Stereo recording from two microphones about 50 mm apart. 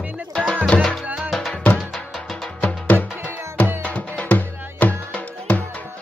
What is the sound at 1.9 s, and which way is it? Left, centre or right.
Music, centre.